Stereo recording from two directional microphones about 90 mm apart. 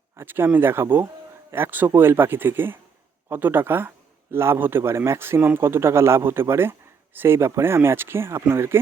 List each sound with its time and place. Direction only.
0.2 s a man's voice: 25° right (ahead or behind)